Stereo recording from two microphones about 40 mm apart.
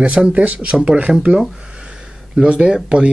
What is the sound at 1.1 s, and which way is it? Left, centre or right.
Speech, centre.